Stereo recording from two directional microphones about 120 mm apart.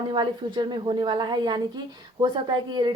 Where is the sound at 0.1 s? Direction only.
40° right (ahead or behind).